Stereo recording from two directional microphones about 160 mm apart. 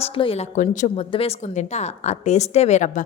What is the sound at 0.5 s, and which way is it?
A woman's voice, 50° left (ahead or behind).